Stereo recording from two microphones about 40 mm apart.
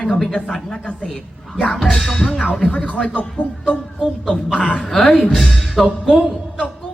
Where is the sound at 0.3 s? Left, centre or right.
Centre.